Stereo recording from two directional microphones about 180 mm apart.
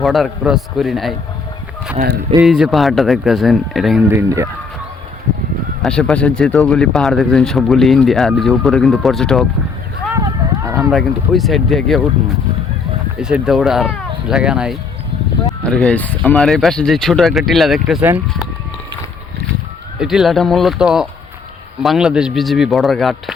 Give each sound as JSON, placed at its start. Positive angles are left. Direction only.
{"t": 0.0, "sound": "speech", "side_deg": 0}
{"t": 2.4, "sound": "speech", "side_deg": 0}
{"t": 4.1, "sound": "speech", "side_deg": -15}
{"t": 5.8, "sound": "speech", "side_deg": 5}
{"t": 10.2, "sound": "a sound", "side_deg": -15}
{"t": 10.9, "sound": "speech", "side_deg": 0}
{"t": 13.1, "sound": "speech", "side_deg": -5}
{"t": 20.0, "sound": "speech", "side_deg": 0}